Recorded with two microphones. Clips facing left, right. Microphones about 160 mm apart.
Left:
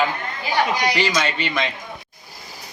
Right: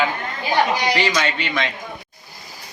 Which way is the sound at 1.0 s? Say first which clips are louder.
Even; centre (ahead or behind).